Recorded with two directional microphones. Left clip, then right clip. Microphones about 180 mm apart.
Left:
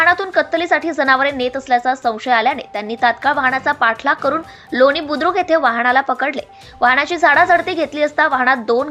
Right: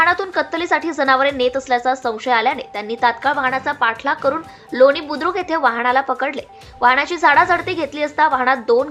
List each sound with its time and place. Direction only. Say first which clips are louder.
0.0 s a woman's voice: left 2 dB; 10° left (ahead or behind)